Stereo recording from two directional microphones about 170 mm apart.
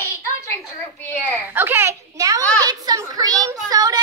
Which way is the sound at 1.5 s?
15° right (ahead or behind).